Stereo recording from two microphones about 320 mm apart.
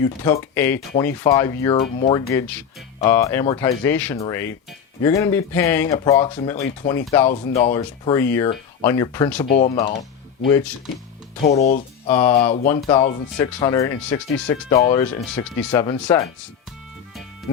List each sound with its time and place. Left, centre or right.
0.0 s speech: centre
2.3 s speech: centre
12.0 s speech: centre